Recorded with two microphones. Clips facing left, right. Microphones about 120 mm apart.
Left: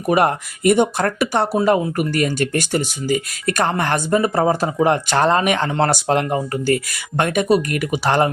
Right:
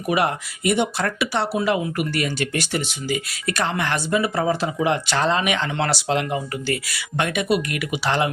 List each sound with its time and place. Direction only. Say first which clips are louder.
0.1 s speech: left 5 dB; 45° left (ahead or behind)